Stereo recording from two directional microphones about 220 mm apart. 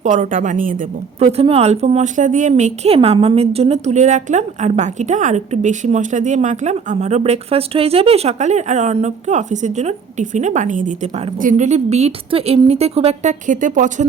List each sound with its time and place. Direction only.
0.0 s a woman's voice: 35° right (ahead or behind)
1.2 s a woman's voice: 25° right (ahead or behind)